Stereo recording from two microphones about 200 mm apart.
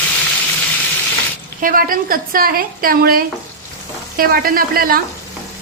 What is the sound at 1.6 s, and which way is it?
A woman's voice, 45° right (ahead or behind).